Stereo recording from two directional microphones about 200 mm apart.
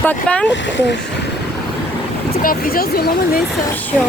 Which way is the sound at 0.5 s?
60° left (ahead or behind).